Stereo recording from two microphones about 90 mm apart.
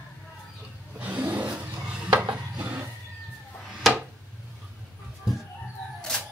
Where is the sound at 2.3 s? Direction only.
15° right (ahead or behind).